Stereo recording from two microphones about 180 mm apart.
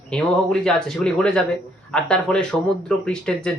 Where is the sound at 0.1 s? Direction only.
5° left (ahead or behind).